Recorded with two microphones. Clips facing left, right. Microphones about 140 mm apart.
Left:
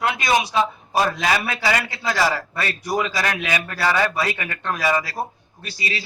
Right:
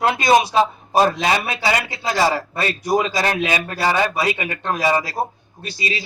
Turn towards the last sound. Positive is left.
turn(degrees=-20)  # may be behind; listen again after turning